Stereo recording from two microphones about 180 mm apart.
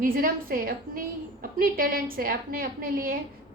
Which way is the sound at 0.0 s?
55° right (ahead or behind).